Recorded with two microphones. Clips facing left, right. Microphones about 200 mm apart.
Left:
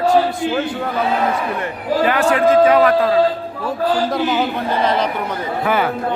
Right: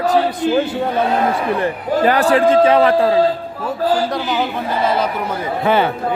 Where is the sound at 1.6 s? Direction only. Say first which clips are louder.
Right 2 dB; 35° right (ahead or behind).